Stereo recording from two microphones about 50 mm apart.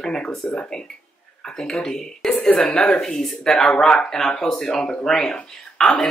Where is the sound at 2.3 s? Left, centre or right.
Left.